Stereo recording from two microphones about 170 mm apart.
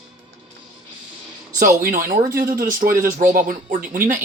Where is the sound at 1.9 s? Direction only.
55° right (ahead or behind).